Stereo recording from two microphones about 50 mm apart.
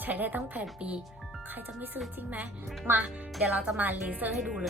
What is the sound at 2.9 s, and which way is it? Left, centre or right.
Speech, right.